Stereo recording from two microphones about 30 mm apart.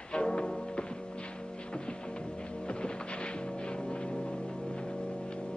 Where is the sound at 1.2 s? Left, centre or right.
Left.